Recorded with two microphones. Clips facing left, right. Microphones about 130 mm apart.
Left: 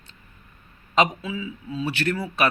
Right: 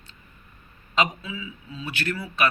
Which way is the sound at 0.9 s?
40° left (ahead or behind).